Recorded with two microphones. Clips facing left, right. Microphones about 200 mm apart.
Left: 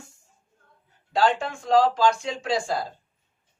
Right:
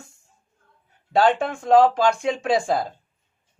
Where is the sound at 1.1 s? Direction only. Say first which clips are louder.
Right 4 dB; 55° right (ahead or behind).